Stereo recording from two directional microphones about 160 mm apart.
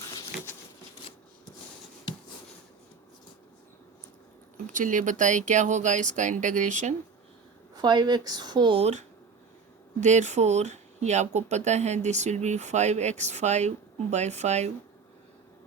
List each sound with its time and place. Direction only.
0.0 s patter: 20° left (ahead or behind)
4.5 s speech: 55° right (ahead or behind)
7.8 s speech: 25° right (ahead or behind); by 14.7 s 45° right (ahead or behind)